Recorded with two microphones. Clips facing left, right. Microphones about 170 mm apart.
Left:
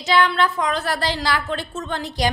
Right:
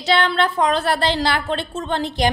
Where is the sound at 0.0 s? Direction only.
30° right (ahead or behind).